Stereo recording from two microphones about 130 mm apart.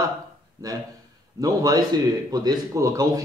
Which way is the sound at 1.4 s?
25° right (ahead or behind).